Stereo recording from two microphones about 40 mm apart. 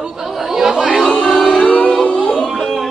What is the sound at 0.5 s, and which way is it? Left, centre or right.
Chatter, centre.